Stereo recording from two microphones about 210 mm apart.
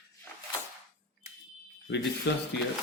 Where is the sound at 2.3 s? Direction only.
50° left (ahead or behind).